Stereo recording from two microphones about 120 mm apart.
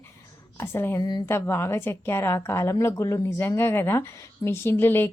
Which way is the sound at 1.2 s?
20° left (ahead or behind).